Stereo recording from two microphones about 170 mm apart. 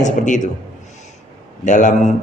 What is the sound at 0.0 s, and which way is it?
Speech, 45° left (ahead or behind).